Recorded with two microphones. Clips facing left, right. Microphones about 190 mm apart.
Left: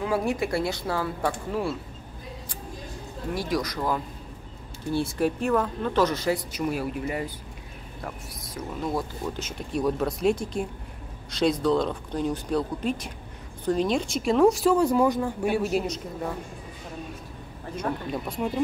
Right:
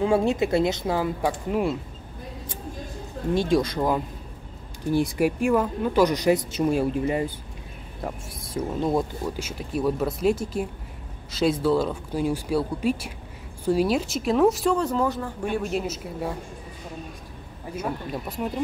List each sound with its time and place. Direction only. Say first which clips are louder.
0.0 s speech: right 5 dB; 25° right (ahead or behind)
3.3 s speech: right 6 dB; 25° right (ahead or behind)
8.5 s speech: right 5 dB; 25° right (ahead or behind)
9.2 s speech: right 2 dB; 10° right (ahead or behind)
14.8 s a woman's voice: left 3 dB; 10° left (ahead or behind); by 16.3 s 5° right (ahead or behind)
17.7 s speech: even; 5° right (ahead or behind)